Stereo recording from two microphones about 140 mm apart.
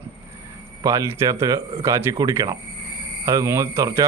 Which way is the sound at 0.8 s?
20° right (ahead or behind).